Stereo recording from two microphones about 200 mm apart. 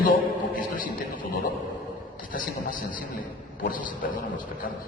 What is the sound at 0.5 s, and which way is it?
Speech, 45° left (ahead or behind).